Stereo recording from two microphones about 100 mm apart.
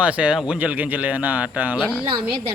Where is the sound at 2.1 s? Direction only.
70° right (ahead or behind).